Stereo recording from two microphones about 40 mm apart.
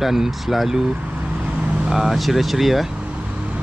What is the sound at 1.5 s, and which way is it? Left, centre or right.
Vehicle, right.